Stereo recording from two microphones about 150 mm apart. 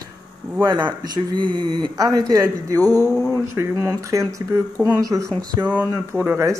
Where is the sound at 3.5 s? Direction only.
20° right (ahead or behind).